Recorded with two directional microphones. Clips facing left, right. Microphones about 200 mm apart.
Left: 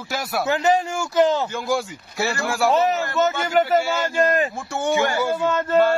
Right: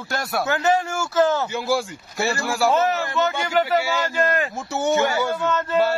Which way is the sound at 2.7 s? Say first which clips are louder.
Left 1 dB; 20° left (ahead or behind).